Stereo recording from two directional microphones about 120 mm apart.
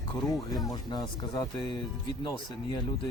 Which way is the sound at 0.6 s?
30° left (ahead or behind).